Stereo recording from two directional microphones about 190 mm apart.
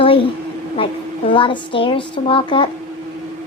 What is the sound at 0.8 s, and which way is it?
A woman's voice, 30° left (ahead or behind).